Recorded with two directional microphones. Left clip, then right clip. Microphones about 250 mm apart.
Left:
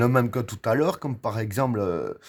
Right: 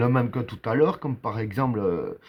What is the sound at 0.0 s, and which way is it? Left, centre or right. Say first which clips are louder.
Speech: left 2 dB; left.